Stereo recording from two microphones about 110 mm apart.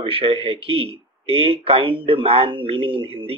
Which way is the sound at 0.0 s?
60° right (ahead or behind).